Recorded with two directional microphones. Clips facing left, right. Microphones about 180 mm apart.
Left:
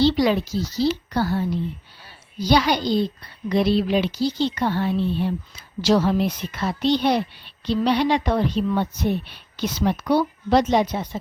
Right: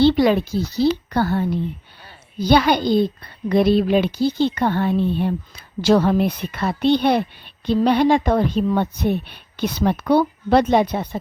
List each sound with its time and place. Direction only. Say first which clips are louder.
0.0 s a woman's voice: right 4 dB; 55° right (ahead or behind)